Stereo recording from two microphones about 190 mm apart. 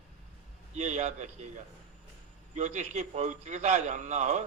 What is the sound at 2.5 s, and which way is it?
A man's voice, 40° right (ahead or behind).